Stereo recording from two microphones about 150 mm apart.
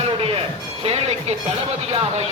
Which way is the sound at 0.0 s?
40° right (ahead or behind).